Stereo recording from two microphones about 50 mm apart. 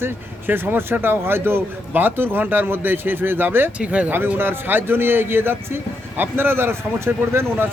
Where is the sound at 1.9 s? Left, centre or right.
Right.